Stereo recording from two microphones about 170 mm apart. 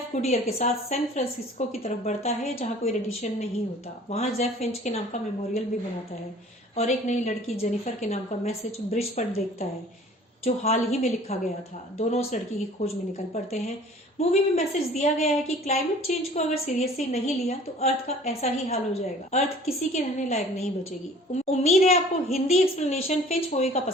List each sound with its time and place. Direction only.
0.1 s a woman's voice: 45° left (ahead or behind)
6.7 s a woman's voice: 45° left (ahead or behind)
10.4 s a woman's voice: 40° left (ahead or behind)
14.2 s a woman's voice: 40° left (ahead or behind)